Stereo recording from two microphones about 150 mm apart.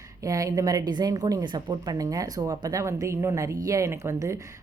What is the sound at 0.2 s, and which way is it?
Speech, 25° right (ahead or behind).